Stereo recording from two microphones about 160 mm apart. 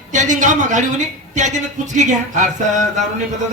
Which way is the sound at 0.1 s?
50° right (ahead or behind).